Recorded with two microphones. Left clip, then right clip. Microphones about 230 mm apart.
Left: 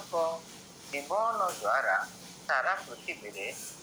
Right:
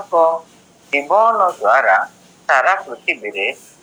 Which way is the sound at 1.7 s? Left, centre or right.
Right.